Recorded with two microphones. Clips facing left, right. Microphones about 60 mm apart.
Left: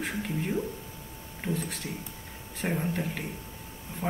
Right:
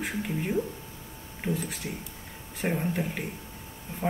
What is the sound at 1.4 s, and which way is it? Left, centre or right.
Speech, centre.